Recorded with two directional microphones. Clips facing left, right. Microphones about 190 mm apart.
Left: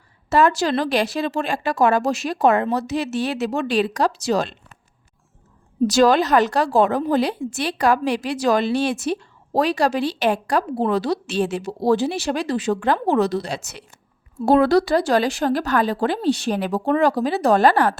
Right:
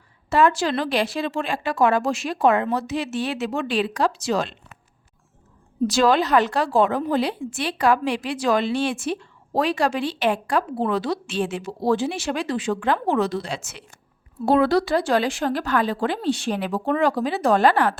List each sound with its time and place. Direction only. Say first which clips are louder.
0.3 s a woman's voice: left 2 dB; 40° left (ahead or behind)
5.9 s a woman's voice: left 2 dB; 40° left (ahead or behind)